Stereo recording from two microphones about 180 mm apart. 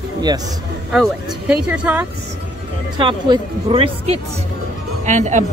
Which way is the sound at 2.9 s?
25° right (ahead or behind).